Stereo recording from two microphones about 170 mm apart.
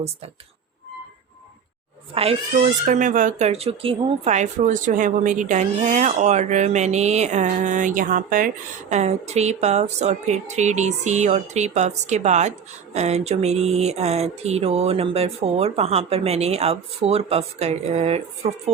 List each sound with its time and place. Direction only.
2.1 s speech: 35° right (ahead or behind); by 8.4 s 55° right (ahead or behind)
8.9 s speech: 40° right (ahead or behind)